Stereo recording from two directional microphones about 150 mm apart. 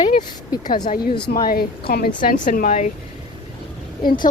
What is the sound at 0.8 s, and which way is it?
Speech, 75° left (ahead or behind).